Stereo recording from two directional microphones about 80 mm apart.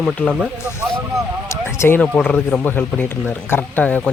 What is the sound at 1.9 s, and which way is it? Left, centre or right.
Speech, centre.